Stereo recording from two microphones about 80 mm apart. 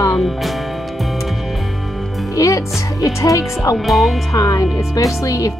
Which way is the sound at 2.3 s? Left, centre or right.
Left.